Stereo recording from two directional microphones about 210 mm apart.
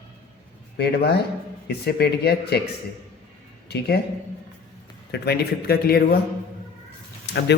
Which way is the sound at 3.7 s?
50° left (ahead or behind).